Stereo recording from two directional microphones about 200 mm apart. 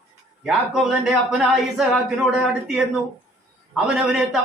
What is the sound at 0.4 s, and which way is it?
A woman's voice, 5° right (ahead or behind).